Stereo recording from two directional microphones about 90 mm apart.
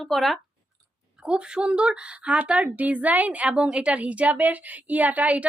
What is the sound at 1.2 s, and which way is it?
A woman's voice, 10° right (ahead or behind).